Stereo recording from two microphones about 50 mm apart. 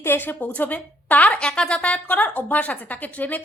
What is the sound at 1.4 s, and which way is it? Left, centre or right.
A woman's voice, centre.